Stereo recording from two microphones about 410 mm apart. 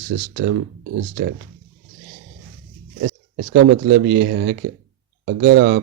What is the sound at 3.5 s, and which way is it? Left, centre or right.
Speech, right.